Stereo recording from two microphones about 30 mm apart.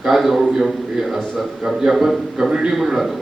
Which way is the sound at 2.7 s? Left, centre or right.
Centre.